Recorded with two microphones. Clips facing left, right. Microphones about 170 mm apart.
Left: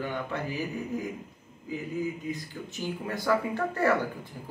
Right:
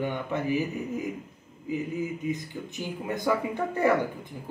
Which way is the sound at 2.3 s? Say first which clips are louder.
Right 3 dB; 20° right (ahead or behind).